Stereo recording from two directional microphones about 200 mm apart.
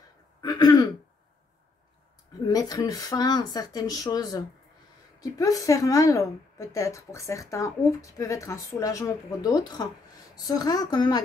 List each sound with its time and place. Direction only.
0.4 s throat clearing: 20° left (ahead or behind)
2.4 s a woman's voice: 20° left (ahead or behind)